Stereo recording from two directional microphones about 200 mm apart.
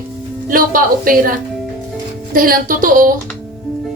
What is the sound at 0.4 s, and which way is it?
Speech, 45° right (ahead or behind).